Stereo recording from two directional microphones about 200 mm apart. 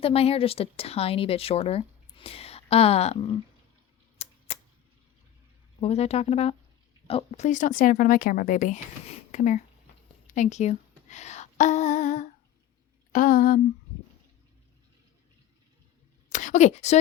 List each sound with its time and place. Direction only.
0.0 s speech: 30° left (ahead or behind)
4.2 s typewriter: 30° left (ahead or behind)
5.8 s speech: 30° left (ahead or behind)
10.2 s a sound: 35° left (ahead or behind)
16.3 s speech: 40° left (ahead or behind)